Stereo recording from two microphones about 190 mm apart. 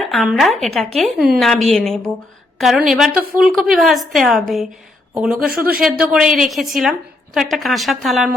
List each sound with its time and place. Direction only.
0.0 s a woman's voice: centre (ahead or behind)
5.5 s speech: 55° right (ahead or behind)
5.8 s a woman's voice: 5° right (ahead or behind)